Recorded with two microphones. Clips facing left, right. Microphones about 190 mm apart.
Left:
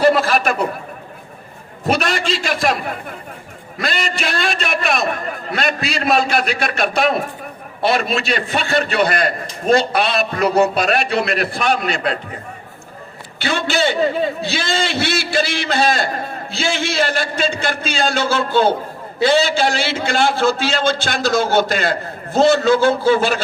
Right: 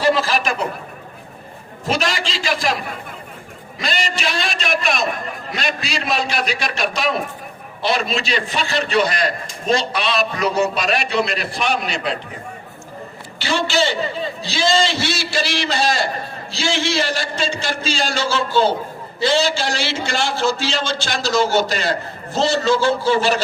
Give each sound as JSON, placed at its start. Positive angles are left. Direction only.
{"t": 0.0, "sound": "a sound", "side_deg": 60}
{"t": 1.8, "sound": "a man's voice", "side_deg": 60}
{"t": 3.8, "sound": "a man's voice", "side_deg": 55}
{"t": 13.4, "sound": "a man's voice", "side_deg": 55}